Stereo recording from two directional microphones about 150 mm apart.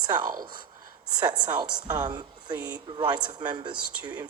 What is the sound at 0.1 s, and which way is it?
A woman's voice, 30° right (ahead or behind).